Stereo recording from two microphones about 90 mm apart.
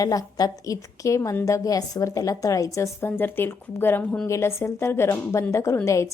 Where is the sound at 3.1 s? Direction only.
25° left (ahead or behind).